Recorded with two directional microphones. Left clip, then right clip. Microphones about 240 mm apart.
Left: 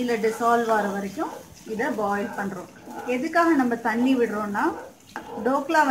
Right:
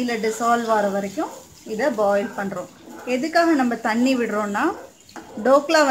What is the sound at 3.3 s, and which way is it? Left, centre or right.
A woman's voice, right.